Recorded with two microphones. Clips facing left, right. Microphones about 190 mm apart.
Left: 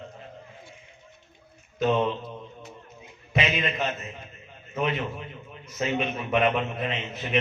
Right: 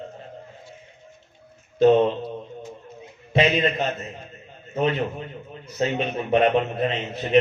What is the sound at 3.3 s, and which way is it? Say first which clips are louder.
A man's voice: right 7 dB; 35° right (ahead or behind).